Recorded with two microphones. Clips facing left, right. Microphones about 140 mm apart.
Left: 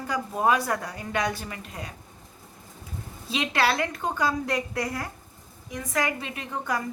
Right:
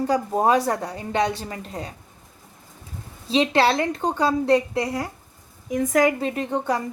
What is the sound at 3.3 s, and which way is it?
A woman's voice, 30° right (ahead or behind).